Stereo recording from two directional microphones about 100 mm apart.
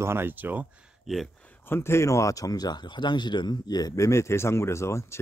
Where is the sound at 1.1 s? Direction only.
Centre (ahead or behind).